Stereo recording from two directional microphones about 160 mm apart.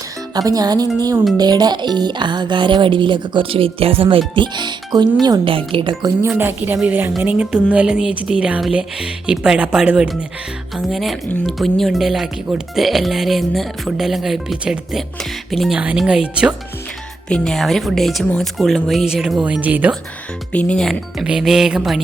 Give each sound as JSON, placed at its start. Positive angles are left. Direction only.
{"t": 0.3, "sound": "speech", "side_deg": -25}
{"t": 6.3, "sound": "speech", "side_deg": -10}
{"t": 17.2, "sound": "speech", "side_deg": 5}
{"t": 20.5, "sound": "speech", "side_deg": 10}